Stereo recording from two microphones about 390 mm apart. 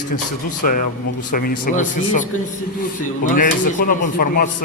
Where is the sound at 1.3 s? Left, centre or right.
Left.